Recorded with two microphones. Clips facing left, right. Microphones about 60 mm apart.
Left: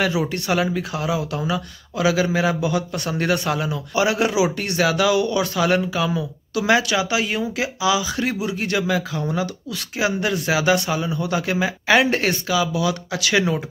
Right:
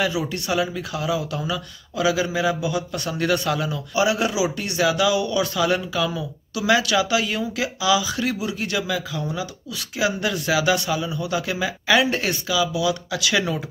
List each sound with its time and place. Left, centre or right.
0.0 s speech: left
13.3 s speech: left